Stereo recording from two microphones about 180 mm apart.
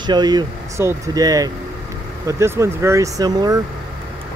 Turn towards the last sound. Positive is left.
turn(degrees=-20)  # may be behind; listen again after turning